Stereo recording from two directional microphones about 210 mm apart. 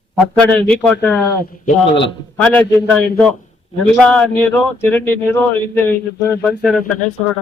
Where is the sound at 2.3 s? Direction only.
5° left (ahead or behind).